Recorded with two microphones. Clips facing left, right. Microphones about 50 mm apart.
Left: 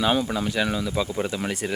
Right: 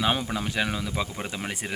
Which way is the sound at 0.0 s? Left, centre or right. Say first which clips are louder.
Left 4 dB; right.